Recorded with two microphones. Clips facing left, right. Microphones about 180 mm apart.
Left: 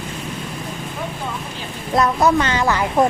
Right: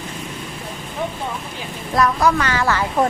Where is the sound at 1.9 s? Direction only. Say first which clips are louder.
Left 1 dB; 25° left (ahead or behind).